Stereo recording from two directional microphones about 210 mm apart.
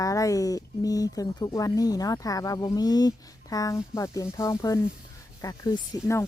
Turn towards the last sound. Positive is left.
turn(degrees=15)  # may be behind; listen again after turning